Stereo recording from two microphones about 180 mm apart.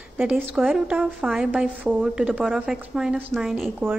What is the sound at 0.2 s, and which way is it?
A woman's voice, 10° right (ahead or behind).